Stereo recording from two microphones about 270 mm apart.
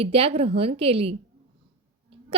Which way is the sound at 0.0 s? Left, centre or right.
Right.